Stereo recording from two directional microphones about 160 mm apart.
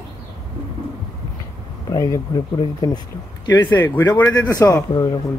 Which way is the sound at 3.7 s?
15° left (ahead or behind).